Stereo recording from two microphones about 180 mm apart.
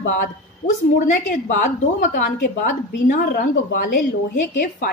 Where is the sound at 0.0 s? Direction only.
50° left (ahead or behind).